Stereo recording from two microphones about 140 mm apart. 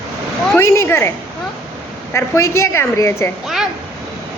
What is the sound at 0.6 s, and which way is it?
Speech, 20° left (ahead or behind).